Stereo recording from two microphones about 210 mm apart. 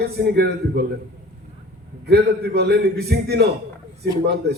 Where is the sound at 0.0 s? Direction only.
50° right (ahead or behind).